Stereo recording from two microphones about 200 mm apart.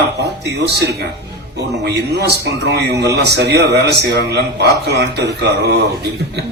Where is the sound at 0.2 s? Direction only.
60° right (ahead or behind).